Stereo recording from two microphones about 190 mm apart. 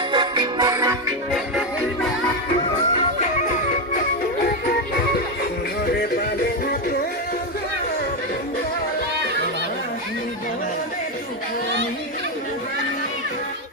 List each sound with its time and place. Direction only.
0.1 s music: 25° right (ahead or behind)
1.3 s music: centre (ahead or behind)
5.8 s music: 55° left (ahead or behind)